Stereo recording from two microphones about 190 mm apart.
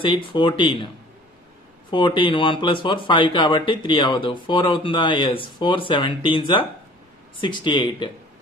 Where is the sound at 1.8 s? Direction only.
25° left (ahead or behind).